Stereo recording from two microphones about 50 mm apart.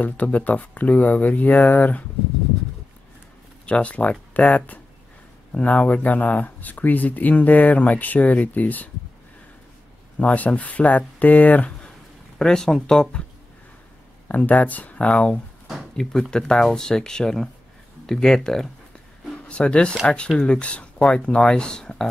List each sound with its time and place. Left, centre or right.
0.0 s speech: left
3.6 s speech: left
10.1 s speech: left
12.4 s speech: centre
14.2 s speech: left
16.0 s speech: centre
19.3 s speech: left